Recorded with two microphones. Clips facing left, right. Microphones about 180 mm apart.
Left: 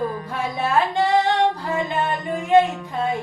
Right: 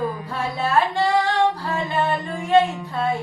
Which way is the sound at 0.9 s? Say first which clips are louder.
Left 1 dB; 20° left (ahead or behind).